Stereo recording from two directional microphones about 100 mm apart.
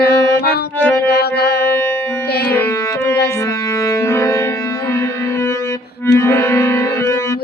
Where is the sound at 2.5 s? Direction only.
20° left (ahead or behind).